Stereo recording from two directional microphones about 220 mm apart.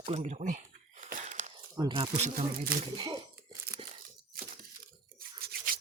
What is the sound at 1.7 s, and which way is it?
Speech, 20° right (ahead or behind).